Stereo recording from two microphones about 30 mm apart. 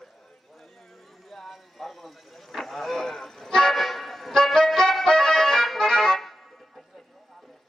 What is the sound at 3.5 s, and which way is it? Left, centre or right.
Music, centre.